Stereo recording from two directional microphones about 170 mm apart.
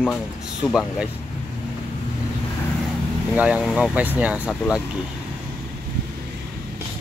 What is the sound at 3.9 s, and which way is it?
Speech, 10° right (ahead or behind).